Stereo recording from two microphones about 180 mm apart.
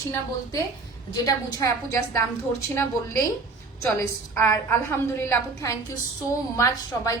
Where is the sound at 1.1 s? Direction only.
20° left (ahead or behind).